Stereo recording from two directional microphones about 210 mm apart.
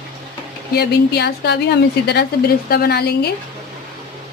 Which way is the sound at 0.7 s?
50° left (ahead or behind).